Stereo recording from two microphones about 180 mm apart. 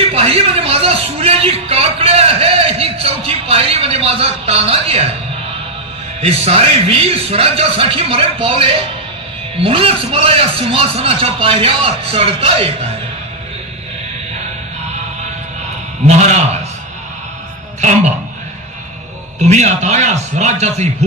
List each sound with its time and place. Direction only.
0.1 s a man's voice: 35° right (ahead or behind)
6.2 s a man's voice: 35° right (ahead or behind)
16.1 s a man's voice: 40° right (ahead or behind)
17.7 s speech: 40° right (ahead or behind)
19.4 s a man's voice: 40° right (ahead or behind)